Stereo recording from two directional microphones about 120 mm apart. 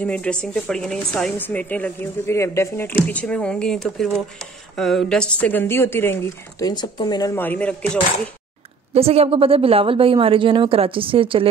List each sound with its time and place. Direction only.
0.0 s speech: 10° left (ahead or behind)
6.6 s speech: 35° left (ahead or behind)
7.3 s speech: 15° left (ahead or behind)
8.9 s a woman's voice: 55° right (ahead or behind)